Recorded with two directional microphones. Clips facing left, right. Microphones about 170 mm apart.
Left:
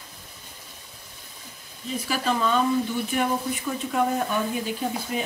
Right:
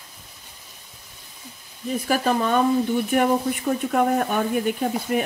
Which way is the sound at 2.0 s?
50° right (ahead or behind).